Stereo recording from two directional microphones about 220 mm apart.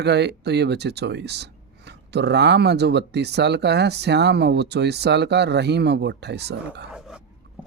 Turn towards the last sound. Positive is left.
turn(degrees=-5)  # may be behind; listen again after turning